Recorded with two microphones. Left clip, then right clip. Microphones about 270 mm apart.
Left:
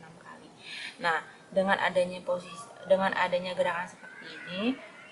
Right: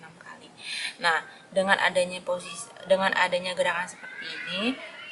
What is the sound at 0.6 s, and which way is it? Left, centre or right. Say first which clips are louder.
Speech: right 5 dB; centre.